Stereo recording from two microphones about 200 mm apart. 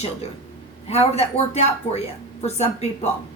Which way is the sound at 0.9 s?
30° left (ahead or behind).